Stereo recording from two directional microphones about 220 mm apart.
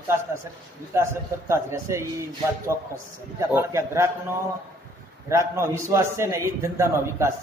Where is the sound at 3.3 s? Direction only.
15° right (ahead or behind).